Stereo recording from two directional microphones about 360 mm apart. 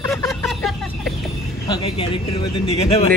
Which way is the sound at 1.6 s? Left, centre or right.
Centre.